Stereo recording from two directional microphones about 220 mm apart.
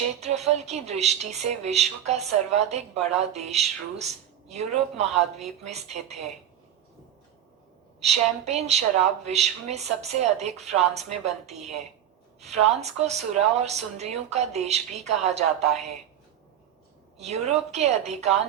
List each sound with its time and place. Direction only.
0.2 s speech: 30° right (ahead or behind)
8.0 s speech: 30° right (ahead or behind)
12.7 s speech: 30° right (ahead or behind)
17.2 s speech: 30° right (ahead or behind)